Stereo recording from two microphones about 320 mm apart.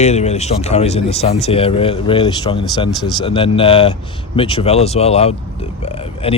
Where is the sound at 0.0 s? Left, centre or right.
Left.